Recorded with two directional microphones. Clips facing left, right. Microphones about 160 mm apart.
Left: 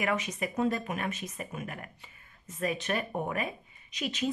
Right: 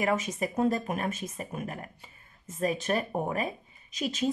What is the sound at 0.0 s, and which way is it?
Speech, 45° right (ahead or behind).